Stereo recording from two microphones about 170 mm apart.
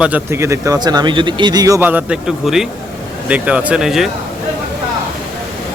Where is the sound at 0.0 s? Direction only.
10° right (ahead or behind).